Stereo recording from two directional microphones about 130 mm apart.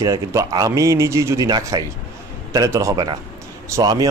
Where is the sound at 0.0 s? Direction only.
25° right (ahead or behind).